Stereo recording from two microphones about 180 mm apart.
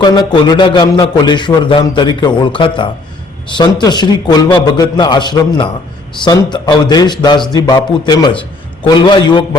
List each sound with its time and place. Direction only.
0.0 s a man's voice: 25° left (ahead or behind)